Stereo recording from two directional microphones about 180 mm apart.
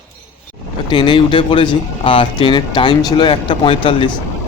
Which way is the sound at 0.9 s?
25° left (ahead or behind).